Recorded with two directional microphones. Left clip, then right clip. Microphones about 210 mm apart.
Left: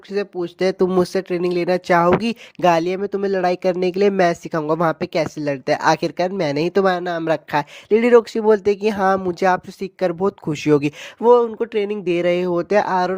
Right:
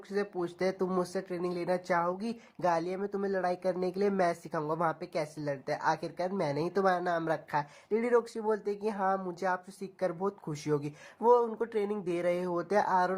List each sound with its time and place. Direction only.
0.1 s speech: 35° left (ahead or behind)